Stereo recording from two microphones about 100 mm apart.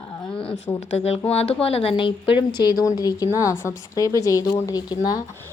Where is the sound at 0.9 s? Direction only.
90° left; by 5.1 s 40° left (ahead or behind).